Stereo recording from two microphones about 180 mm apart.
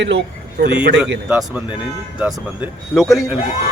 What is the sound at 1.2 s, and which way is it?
Speech, 10° right (ahead or behind).